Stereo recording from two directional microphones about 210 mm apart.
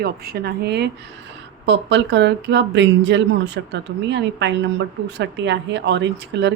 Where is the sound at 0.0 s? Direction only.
45° right (ahead or behind).